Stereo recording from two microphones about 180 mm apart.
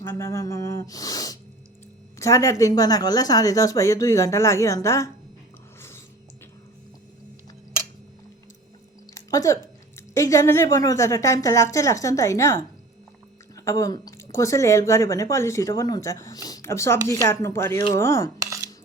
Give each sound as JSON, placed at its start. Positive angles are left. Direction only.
{"t": 0.0, "sound": "a woman's voice", "side_deg": 15}
{"t": 9.3, "sound": "a woman's voice", "side_deg": 20}